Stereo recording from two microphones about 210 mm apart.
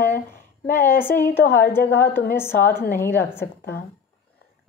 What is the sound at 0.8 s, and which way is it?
A woman's voice, 10° left (ahead or behind).